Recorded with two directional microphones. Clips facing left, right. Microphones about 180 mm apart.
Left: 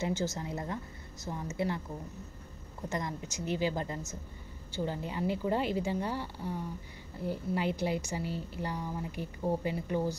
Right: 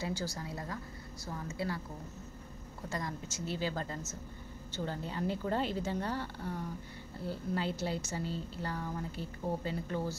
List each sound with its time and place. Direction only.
0.0 s a woman's voice: 20° left (ahead or behind)
2.9 s a woman's voice: 20° left (ahead or behind)